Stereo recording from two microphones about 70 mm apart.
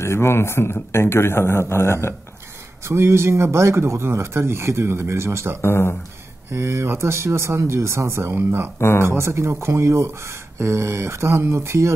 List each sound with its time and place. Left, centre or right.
0.0 s a man's voice: left
2.8 s speech: right
5.6 s a man's voice: left
6.5 s speech: right
8.7 s a man's voice: left
9.0 s speech: right